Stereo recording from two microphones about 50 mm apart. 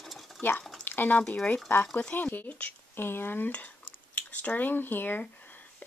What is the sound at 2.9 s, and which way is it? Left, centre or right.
Speech, left.